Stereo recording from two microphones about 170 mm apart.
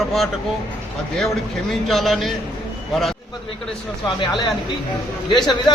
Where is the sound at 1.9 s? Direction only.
Centre (ahead or behind).